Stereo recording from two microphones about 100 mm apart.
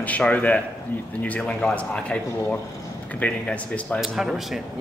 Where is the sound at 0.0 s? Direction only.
15° left (ahead or behind).